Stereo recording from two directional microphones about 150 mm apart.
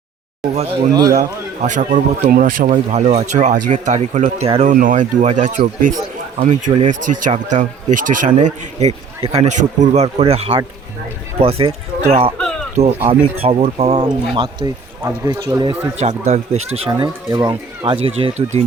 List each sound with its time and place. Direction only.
0.5 s speech: 45° right (ahead or behind)
1.6 s speech: 55° right (ahead or behind)
4.7 s speech: 60° right (ahead or behind)
6.7 s speech: 35° right (ahead or behind)
7.3 s speech: 55° right (ahead or behind)
14.0 s speech: 30° right (ahead or behind)
16.0 s speech: 50° right (ahead or behind)
17.3 s speech: 20° right (ahead or behind)
17.8 s speech: 40° right (ahead or behind)